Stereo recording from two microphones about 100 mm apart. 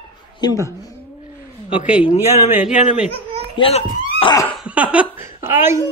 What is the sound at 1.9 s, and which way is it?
Speech, 15° right (ahead or behind).